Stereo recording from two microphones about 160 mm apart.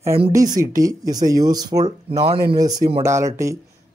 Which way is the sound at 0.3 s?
20° right (ahead or behind).